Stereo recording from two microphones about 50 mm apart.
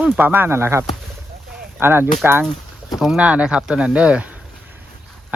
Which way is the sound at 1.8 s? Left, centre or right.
Right.